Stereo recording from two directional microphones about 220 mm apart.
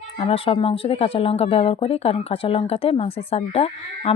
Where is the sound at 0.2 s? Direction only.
25° left (ahead or behind).